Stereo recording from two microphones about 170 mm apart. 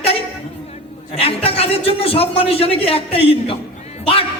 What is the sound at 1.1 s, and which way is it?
A man's voice, 35° left (ahead or behind).